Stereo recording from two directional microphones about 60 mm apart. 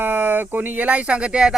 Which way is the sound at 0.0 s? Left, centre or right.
Right.